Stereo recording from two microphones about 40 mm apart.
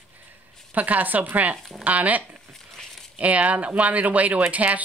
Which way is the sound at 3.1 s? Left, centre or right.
Right.